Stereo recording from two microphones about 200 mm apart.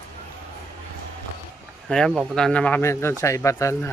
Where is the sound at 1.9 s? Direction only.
5° left (ahead or behind).